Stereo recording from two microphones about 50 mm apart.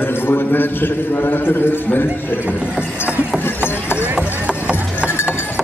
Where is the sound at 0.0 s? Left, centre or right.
Left.